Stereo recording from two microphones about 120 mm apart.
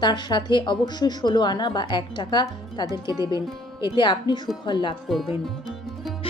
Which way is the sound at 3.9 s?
40° left (ahead or behind).